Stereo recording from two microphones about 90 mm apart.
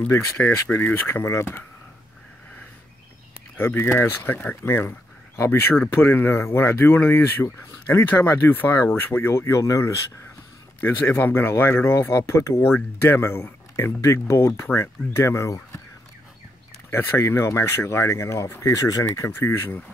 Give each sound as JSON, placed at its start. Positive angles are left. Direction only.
{"t": 0.0, "sound": "speech", "side_deg": 25}
{"t": 3.5, "sound": "speech", "side_deg": 25}
{"t": 10.8, "sound": "speech", "side_deg": 20}
{"t": 16.9, "sound": "speech", "side_deg": 25}
{"t": 19.2, "sound": "speech", "side_deg": 25}